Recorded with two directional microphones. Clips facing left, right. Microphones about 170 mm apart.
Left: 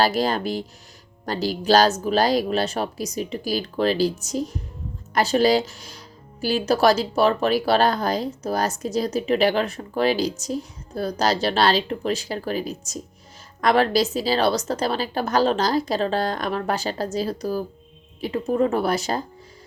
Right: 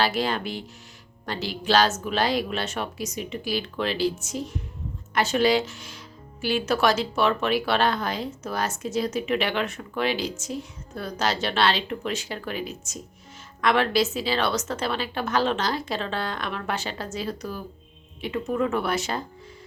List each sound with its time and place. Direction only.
0.0 s speech: 40° left (ahead or behind)